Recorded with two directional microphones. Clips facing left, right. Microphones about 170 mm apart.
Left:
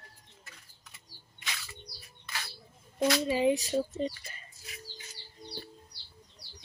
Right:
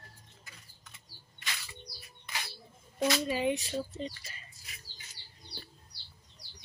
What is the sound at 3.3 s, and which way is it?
Speech, 30° left (ahead or behind).